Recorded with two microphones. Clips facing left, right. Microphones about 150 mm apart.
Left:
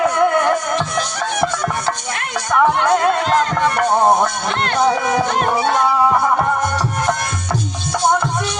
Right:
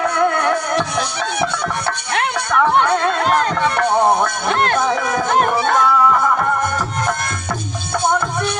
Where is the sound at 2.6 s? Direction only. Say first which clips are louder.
Left 1 dB; 10° left (ahead or behind).